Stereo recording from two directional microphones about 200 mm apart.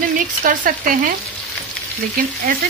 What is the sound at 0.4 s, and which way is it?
Frying, 45° right (ahead or behind).